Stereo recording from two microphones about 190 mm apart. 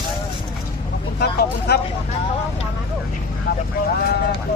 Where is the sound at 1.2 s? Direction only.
55° left (ahead or behind).